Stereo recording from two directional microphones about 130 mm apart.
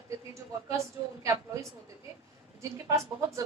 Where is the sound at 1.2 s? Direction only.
25° right (ahead or behind).